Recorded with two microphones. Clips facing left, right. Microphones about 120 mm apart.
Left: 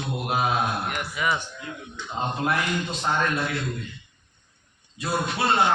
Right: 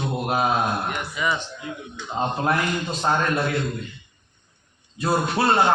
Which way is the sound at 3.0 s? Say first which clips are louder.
Right 4 dB; 40° right (ahead or behind).